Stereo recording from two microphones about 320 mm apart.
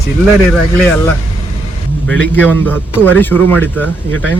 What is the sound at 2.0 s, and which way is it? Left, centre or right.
A man's voice, centre.